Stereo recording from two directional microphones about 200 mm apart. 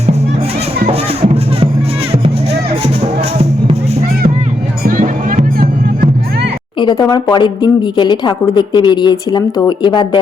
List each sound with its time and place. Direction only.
4.9 s music: 45° right (ahead or behind)
6.7 s speech: 20° left (ahead or behind)